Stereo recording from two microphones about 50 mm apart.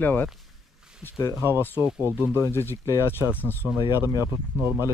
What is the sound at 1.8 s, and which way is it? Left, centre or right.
Speech, right.